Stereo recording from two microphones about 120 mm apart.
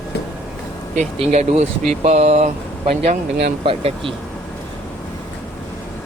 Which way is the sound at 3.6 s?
50° right (ahead or behind).